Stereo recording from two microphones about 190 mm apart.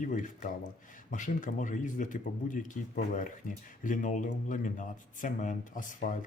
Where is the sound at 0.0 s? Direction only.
40° left (ahead or behind).